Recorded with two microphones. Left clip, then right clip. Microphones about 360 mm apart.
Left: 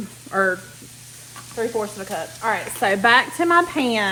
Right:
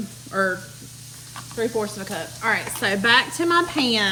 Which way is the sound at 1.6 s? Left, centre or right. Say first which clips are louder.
Left 1 dB; centre.